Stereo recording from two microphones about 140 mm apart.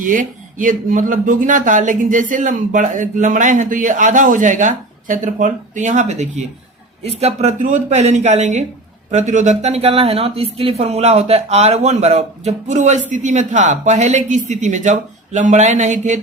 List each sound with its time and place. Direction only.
0.0 s speech: 70° right (ahead or behind)